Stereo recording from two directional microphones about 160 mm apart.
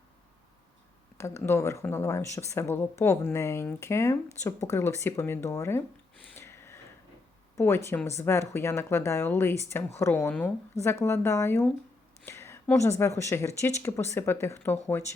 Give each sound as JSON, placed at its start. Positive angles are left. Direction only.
{"t": 1.2, "sound": "speech", "side_deg": 15}
{"t": 6.3, "sound": "a sound", "side_deg": 15}
{"t": 7.5, "sound": "speech", "side_deg": 15}